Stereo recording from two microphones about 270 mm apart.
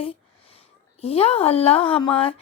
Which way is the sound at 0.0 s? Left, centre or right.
Left.